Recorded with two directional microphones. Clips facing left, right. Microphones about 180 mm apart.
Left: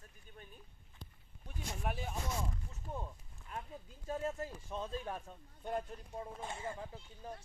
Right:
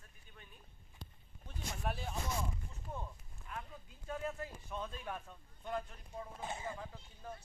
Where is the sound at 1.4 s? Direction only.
15° left (ahead or behind).